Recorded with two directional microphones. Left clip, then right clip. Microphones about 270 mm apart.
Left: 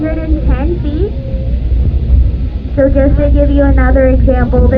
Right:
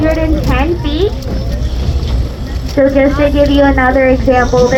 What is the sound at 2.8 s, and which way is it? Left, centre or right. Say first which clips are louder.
Speech: right 2 dB; right.